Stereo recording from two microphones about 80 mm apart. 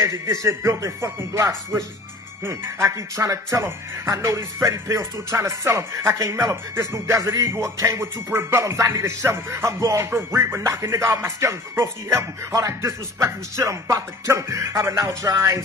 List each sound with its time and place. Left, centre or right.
0.0 s speech: right